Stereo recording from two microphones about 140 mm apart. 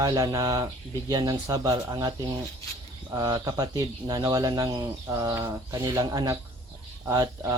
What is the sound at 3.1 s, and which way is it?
Speech, 25° right (ahead or behind).